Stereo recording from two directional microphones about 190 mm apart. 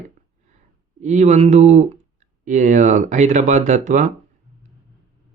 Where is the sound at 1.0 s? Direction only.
40° right (ahead or behind).